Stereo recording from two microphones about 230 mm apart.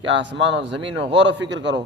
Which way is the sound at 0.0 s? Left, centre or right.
Right.